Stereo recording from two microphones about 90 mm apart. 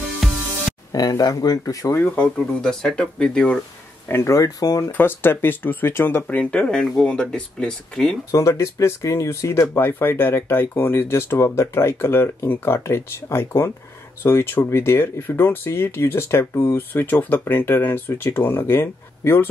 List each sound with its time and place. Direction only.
0.2 s music: centre (ahead or behind)
0.9 s speech: 40° left (ahead or behind)
2.0 s speech: 10° left (ahead or behind)
4.1 s speech: 30° left (ahead or behind)
4.9 s speech: 25° left (ahead or behind)
6.5 s speech: 10° left (ahead or behind)
8.3 s speech: 35° left (ahead or behind)